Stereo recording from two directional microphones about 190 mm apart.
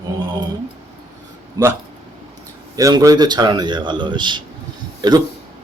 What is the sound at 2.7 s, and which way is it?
Speech, 20° right (ahead or behind).